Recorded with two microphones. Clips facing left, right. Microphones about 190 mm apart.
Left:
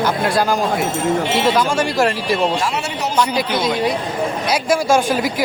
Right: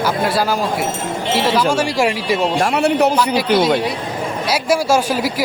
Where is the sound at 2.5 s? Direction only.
55° right (ahead or behind).